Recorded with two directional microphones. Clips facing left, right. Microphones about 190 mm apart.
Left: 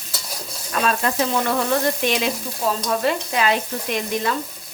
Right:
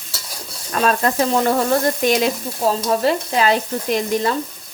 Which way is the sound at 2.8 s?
35° right (ahead or behind).